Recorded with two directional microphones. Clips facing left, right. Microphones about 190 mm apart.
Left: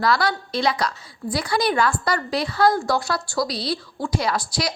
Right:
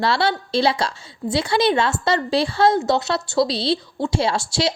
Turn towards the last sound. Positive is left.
turn(degrees=-25)  # may be behind; listen again after turning